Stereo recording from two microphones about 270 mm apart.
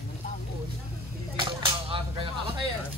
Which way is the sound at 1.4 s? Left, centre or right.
Centre.